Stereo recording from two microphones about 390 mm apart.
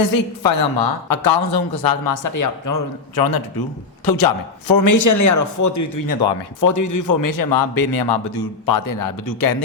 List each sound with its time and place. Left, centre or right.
0.0 s a man's voice: left
4.7 s a man's voice: left
8.6 s a man's voice: left